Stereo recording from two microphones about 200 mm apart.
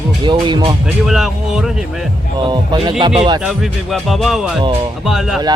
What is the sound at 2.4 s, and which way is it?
Speech, 25° right (ahead or behind).